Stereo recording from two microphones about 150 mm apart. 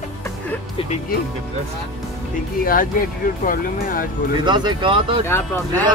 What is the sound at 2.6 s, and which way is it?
Speech, 70° left (ahead or behind).